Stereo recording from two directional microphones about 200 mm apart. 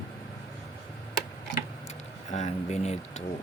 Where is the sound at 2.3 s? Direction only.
35° left (ahead or behind).